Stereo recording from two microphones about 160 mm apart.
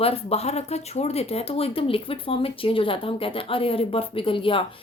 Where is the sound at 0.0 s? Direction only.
40° left (ahead or behind).